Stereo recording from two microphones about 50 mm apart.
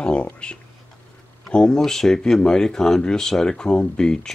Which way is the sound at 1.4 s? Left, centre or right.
Centre.